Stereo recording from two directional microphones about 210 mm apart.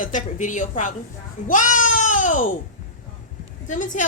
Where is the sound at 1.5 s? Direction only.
40° left (ahead or behind).